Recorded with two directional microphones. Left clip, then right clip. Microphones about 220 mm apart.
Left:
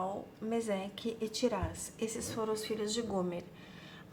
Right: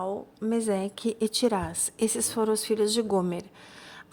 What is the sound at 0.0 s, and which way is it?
A woman's voice, 45° right (ahead or behind).